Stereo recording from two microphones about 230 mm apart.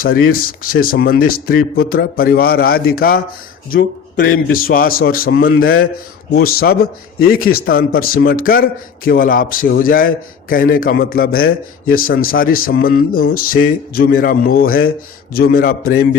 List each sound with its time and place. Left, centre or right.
0.0 s a man's voice: left